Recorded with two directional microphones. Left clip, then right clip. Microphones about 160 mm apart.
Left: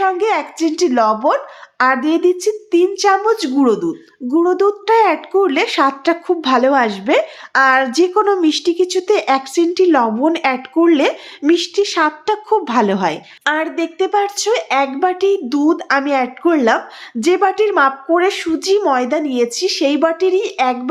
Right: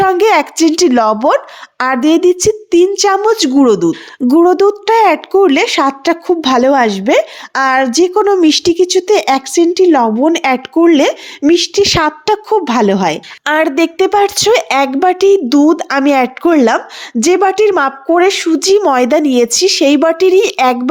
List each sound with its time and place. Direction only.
0.0 s a woman's voice: 65° right (ahead or behind); by 10.3 s 30° right (ahead or behind)
10.3 s speech: 40° right (ahead or behind)
13.4 s a woman's voice: 65° right (ahead or behind); by 18.9 s 45° right (ahead or behind)
18.9 s speech: 60° right (ahead or behind)